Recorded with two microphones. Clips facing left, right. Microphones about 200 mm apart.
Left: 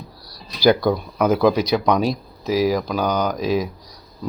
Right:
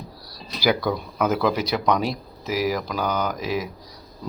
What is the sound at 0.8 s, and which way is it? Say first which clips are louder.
Speech: left 4 dB; 10° left (ahead or behind).